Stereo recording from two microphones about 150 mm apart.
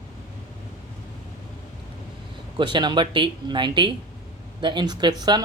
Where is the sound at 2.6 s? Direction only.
30° right (ahead or behind).